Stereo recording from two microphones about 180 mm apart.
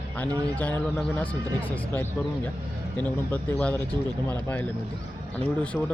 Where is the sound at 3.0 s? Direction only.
10° left (ahead or behind).